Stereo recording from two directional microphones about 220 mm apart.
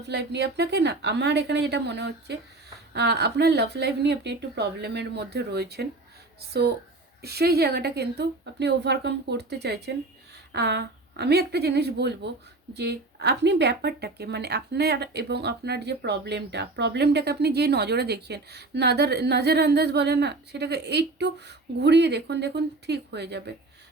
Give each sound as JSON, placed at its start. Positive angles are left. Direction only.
{"t": 0.0, "sound": "speech", "side_deg": -50}